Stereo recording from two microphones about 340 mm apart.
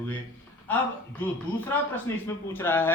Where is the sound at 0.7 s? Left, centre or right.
Centre.